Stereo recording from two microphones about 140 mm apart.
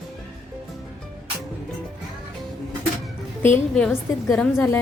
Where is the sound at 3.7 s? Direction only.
5° left (ahead or behind).